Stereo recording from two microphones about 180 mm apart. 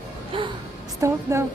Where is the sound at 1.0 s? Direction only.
15° right (ahead or behind).